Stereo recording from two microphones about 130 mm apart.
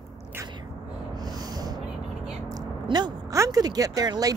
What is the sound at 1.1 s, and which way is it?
Snort, 30° right (ahead or behind).